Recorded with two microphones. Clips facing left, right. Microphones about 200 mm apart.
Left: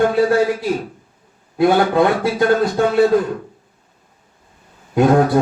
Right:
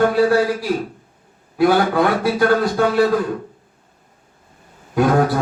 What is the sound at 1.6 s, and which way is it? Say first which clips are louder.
A man's voice: left 1 dB; 20° left (ahead or behind).